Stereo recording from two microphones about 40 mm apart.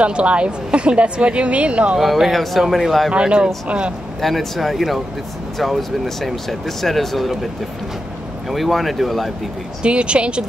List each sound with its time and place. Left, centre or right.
0.0 s a woman's voice: right
2.3 s speech: centre
3.1 s a woman's voice: right
4.2 s speech: centre
8.5 s speech: centre
9.8 s a woman's voice: right